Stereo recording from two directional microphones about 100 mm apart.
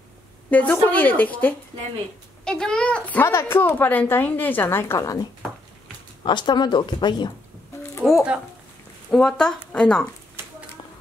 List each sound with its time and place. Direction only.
0.5 s a woman's voice: 15° left (ahead or behind); by 5.3 s 35° left (ahead or behind)
6.2 s a woman's voice: 50° left (ahead or behind)
8.0 s a child's voice: 5° right (ahead or behind)